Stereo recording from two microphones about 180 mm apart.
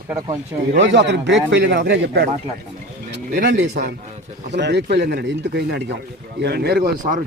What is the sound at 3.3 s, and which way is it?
Speech, 50° right (ahead or behind).